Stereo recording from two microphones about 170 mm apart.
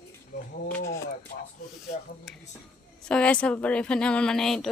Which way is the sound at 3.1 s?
5° left (ahead or behind).